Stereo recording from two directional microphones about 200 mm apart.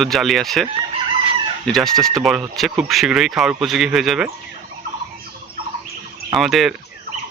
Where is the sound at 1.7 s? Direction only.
Centre (ahead or behind).